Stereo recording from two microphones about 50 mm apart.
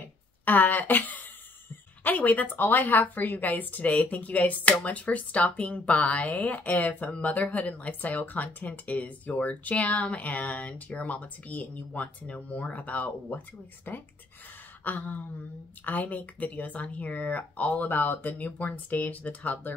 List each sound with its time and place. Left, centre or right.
0.5 s speech: left
13.9 s speech: left
18.4 s speech: left